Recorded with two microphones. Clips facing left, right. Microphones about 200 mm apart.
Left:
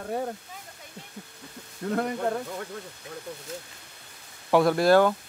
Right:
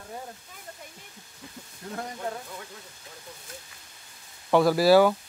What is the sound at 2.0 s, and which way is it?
Speech, 60° left (ahead or behind).